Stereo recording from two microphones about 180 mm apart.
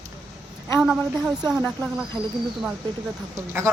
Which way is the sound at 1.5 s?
Centre (ahead or behind).